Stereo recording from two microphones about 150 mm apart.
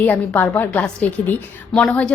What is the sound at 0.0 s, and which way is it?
A woman's voice, 10° left (ahead or behind).